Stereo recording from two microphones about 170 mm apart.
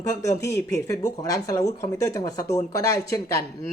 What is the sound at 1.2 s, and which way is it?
Speech, 20° left (ahead or behind).